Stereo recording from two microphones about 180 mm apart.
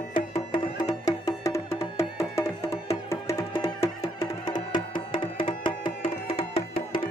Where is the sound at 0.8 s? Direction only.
20° left (ahead or behind).